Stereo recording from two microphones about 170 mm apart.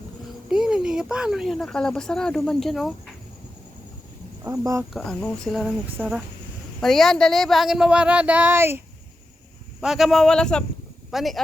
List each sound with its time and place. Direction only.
0.5 s speech: 5° right (ahead or behind)
4.4 s speech: 20° right (ahead or behind)
4.9 s speech: 5° left (ahead or behind); by 8.8 s 15° right (ahead or behind)
9.8 s speech: centre (ahead or behind)